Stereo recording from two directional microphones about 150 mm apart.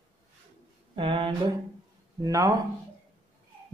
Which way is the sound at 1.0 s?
35° right (ahead or behind).